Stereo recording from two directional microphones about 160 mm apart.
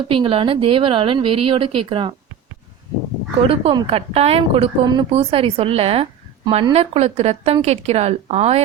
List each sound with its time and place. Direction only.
0.1 s a woman's voice: 35° right (ahead or behind)
3.4 s a woman's voice: 35° right (ahead or behind)